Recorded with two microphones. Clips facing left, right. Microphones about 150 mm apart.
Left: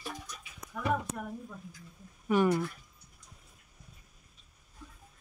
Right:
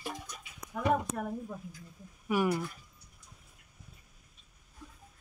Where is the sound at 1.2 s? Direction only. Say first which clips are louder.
Right 4 dB; 45° right (ahead or behind).